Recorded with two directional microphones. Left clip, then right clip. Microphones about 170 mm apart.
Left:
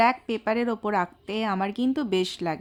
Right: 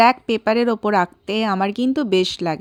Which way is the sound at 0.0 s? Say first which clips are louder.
Right 8 dB; 40° right (ahead or behind).